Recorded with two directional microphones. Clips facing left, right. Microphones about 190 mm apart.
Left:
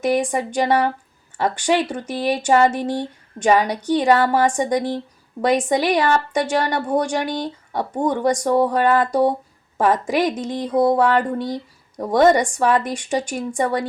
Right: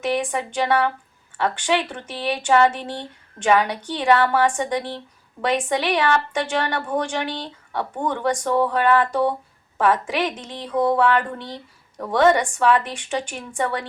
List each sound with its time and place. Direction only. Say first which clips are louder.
0.0 s a woman's voice: left 4 dB; 40° left (ahead or behind)